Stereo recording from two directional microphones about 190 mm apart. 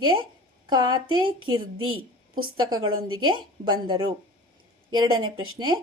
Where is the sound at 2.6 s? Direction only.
20° right (ahead or behind).